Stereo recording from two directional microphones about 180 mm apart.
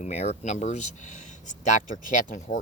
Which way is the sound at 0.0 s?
35° left (ahead or behind).